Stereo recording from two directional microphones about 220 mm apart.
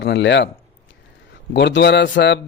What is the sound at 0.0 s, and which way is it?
Speech, 55° left (ahead or behind).